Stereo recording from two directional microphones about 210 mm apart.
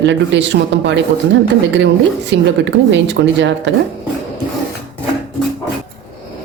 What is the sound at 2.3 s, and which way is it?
Speech, 60° right (ahead or behind).